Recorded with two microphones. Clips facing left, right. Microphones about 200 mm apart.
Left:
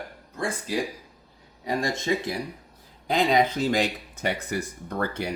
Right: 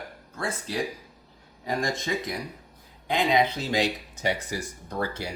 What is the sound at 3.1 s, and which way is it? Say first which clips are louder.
Speech: left 2 dB; 45° left (ahead or behind).